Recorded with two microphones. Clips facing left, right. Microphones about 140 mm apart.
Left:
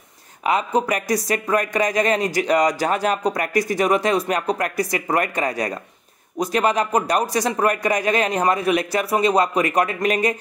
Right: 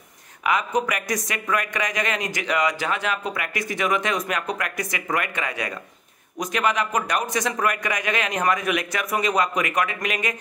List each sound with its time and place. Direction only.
0.4 s speech: 35° left (ahead or behind)